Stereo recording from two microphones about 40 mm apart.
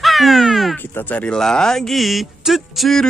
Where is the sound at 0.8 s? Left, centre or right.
Left.